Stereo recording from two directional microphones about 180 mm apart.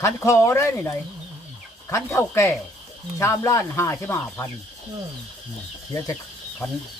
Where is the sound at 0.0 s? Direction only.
15° left (ahead or behind).